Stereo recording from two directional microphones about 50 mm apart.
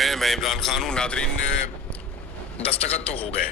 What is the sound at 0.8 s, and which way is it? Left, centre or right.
Speech, centre.